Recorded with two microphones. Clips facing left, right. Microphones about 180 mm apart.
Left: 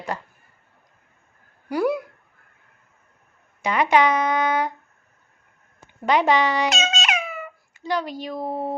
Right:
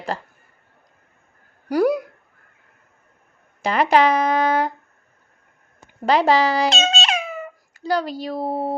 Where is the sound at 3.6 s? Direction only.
35° right (ahead or behind).